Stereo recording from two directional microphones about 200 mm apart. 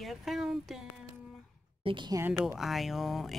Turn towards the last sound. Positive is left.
turn(degrees=0)  # may be behind; listen again after turning